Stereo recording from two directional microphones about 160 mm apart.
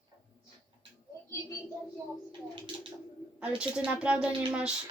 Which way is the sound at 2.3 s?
30° right (ahead or behind).